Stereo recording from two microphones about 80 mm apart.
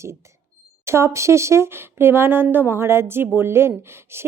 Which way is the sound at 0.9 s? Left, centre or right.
Right.